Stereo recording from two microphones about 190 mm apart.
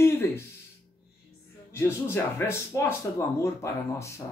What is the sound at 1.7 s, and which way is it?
Speech, 15° left (ahead or behind).